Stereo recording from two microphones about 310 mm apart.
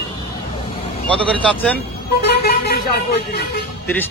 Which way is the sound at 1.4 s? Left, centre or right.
Centre.